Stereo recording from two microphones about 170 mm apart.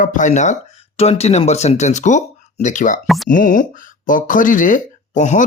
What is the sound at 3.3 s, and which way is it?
Speech, 50° left (ahead or behind).